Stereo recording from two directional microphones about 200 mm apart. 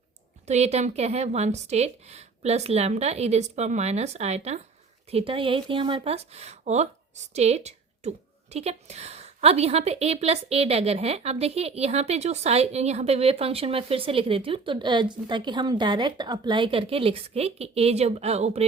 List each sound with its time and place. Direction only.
0.4 s a woman's voice: 35° right (ahead or behind)